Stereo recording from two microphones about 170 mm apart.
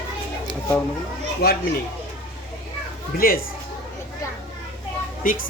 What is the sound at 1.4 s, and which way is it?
Speech, 65° left (ahead or behind).